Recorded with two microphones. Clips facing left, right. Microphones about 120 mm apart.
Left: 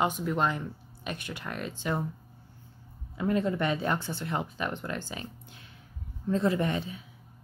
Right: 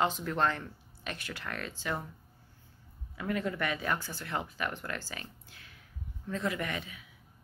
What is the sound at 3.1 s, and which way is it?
Speech, 25° left (ahead or behind).